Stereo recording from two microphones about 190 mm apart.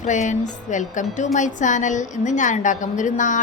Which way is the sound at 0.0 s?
40° left (ahead or behind).